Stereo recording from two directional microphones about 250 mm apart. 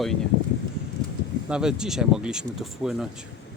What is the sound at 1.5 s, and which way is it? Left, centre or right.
Speech, centre.